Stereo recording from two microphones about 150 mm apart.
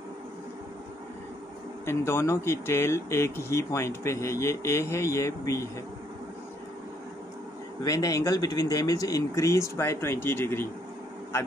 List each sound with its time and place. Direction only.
1.9 s speech: 15° left (ahead or behind)
7.8 s speech: 20° left (ahead or behind)